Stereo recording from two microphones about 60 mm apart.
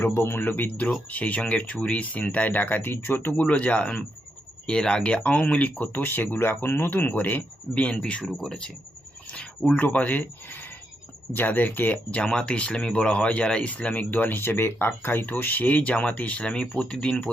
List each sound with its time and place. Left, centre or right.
0.0 s speech: left; by 8.7 s centre
9.3 s cricket: centre
9.8 s speech: left
12.2 s speech: centre